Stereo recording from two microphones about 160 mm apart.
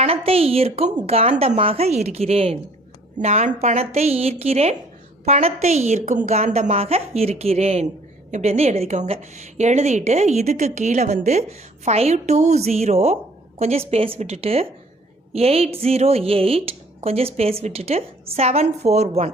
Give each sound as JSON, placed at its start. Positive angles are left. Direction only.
{"t": 0.0, "sound": "a woman's voice", "side_deg": -35}